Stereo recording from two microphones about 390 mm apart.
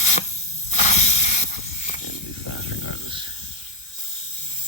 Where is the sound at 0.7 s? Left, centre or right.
Centre.